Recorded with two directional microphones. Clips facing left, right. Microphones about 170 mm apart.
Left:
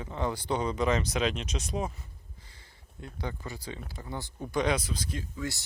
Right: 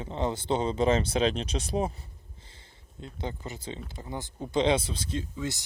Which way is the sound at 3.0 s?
20° right (ahead or behind).